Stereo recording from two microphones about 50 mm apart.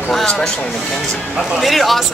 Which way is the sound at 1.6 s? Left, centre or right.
Centre.